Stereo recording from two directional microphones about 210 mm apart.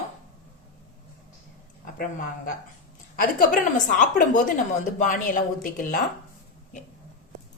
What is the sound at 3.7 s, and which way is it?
Speech, 35° left (ahead or behind).